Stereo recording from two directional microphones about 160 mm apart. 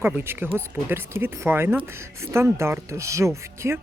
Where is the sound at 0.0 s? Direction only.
15° right (ahead or behind).